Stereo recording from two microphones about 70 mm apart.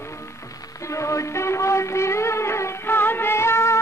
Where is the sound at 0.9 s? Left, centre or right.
Left.